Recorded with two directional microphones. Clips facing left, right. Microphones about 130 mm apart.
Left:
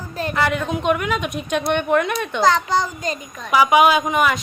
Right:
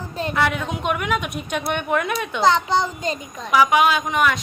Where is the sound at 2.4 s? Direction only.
25° right (ahead or behind).